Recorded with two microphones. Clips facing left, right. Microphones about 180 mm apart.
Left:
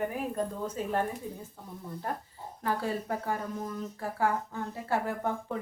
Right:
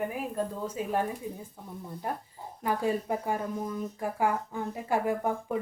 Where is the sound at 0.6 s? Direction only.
10° right (ahead or behind).